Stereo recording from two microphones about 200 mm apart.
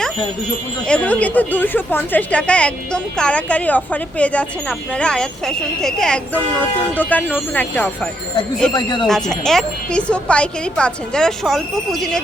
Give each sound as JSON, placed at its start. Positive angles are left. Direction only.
{"t": 0.9, "sound": "a woman's voice", "side_deg": 5}
{"t": 8.7, "sound": "speech", "side_deg": 25}
{"t": 9.0, "sound": "a woman's voice", "side_deg": 0}